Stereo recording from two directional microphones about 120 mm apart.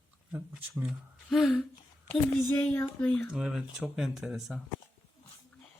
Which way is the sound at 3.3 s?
5° right (ahead or behind).